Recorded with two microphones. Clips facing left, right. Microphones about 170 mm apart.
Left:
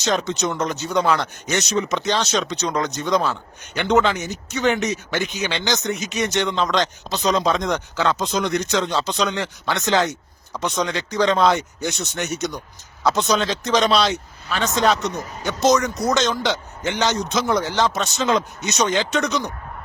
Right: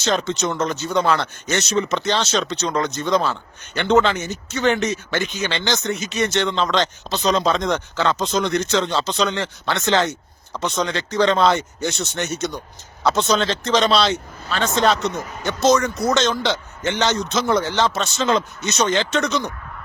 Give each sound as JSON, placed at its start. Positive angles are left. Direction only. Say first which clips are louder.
{"t": 0.0, "sound": "speech", "louder": "right 1 dB", "side_deg": 10}